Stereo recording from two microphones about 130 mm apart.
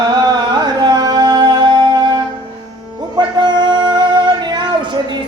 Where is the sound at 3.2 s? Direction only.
35° right (ahead or behind).